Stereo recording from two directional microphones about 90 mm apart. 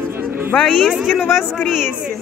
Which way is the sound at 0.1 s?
25° right (ahead or behind).